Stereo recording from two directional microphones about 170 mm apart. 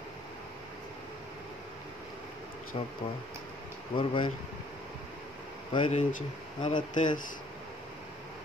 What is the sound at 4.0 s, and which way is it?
Speech, 30° left (ahead or behind).